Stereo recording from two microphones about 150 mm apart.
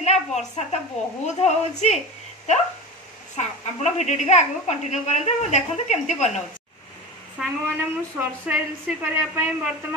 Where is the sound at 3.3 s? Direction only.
50° left (ahead or behind).